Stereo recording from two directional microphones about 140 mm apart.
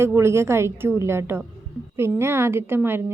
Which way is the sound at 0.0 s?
20° right (ahead or behind).